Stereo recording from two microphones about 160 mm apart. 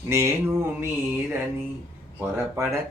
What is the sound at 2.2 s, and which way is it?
Speech, 15° right (ahead or behind).